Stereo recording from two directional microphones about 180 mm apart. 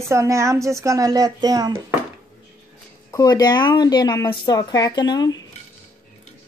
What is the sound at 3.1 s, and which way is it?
A woman's voice, 20° left (ahead or behind).